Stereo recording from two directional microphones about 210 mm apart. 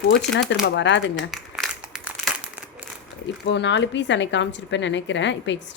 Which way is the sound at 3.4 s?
55° left (ahead or behind).